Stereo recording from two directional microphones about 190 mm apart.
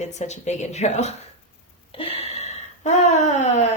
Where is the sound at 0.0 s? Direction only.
35° left (ahead or behind).